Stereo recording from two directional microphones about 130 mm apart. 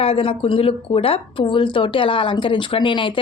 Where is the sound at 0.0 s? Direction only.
45° left (ahead or behind).